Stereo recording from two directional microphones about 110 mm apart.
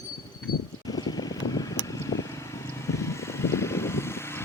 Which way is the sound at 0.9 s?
35° left (ahead or behind).